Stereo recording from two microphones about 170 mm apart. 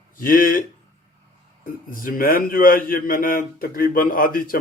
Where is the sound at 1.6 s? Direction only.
55° left (ahead or behind).